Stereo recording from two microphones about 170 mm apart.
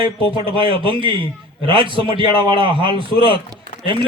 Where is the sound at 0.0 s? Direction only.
30° right (ahead or behind).